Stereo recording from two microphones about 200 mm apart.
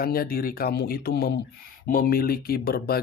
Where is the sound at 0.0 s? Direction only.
50° left (ahead or behind).